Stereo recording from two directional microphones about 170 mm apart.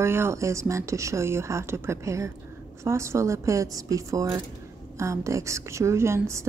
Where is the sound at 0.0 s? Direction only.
15° right (ahead or behind).